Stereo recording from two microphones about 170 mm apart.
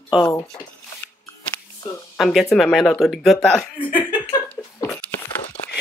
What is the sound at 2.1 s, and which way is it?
Speech, centre (ahead or behind).